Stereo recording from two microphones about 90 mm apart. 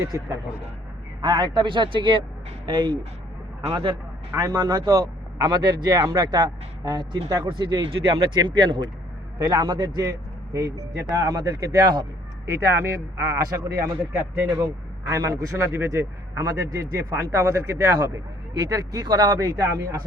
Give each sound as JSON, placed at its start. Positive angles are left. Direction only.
{"t": 0.1, "sound": "a man's voice", "side_deg": -30}
{"t": 1.2, "sound": "a man's voice", "side_deg": -50}
{"t": 4.4, "sound": "speech", "side_deg": -45}
{"t": 7.4, "sound": "a man's voice", "side_deg": -60}
{"t": 9.4, "sound": "speech", "side_deg": -50}
{"t": 12.5, "sound": "a man's voice", "side_deg": -30}
{"t": 15.1, "sound": "a man's voice", "side_deg": -35}